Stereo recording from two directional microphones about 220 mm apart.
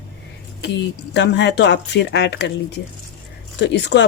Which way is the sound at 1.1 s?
50° left (ahead or behind).